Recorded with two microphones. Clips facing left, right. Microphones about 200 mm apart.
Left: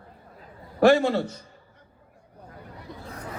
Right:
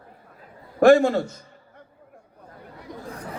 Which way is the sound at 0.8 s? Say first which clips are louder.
Right 3 dB; 50° right (ahead or behind).